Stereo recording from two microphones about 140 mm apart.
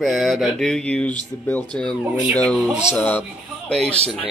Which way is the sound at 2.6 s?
5° right (ahead or behind).